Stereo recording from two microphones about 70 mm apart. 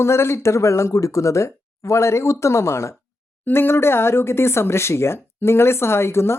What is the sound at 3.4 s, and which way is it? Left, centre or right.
Speech, left.